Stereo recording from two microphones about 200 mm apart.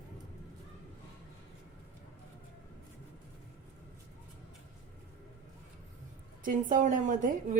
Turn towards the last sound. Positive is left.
turn(degrees=-40)  # may be behind; listen again after turning